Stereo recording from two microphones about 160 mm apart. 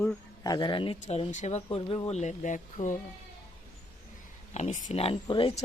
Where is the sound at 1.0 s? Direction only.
45° left (ahead or behind).